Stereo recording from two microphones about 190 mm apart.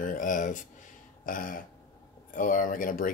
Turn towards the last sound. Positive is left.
turn(degrees=45)  # may be behind; listen again after turning